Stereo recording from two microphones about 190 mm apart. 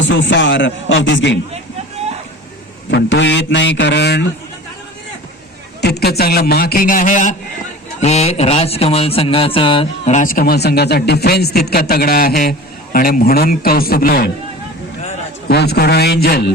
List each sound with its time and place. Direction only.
0.0 s a man's voice: 75° left (ahead or behind)
2.9 s a man's voice: 70° left (ahead or behind)
5.8 s a man's voice: 60° left (ahead or behind)
15.4 s a man's voice: 55° left (ahead or behind)